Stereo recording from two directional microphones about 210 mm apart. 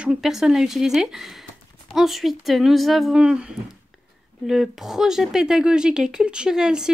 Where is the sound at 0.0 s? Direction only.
5° right (ahead or behind).